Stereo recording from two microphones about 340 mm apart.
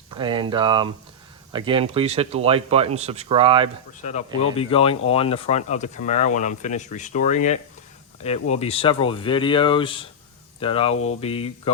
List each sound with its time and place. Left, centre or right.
0.1 s speech: centre
4.0 s speech: centre